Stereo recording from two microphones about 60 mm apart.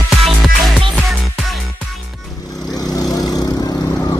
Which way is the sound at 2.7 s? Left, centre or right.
Left.